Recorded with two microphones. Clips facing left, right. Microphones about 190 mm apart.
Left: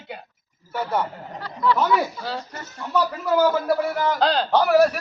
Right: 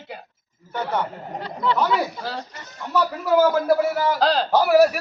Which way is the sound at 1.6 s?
25° right (ahead or behind).